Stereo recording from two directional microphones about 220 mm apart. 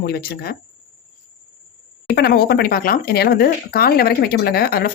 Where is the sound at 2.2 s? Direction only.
45° left (ahead or behind).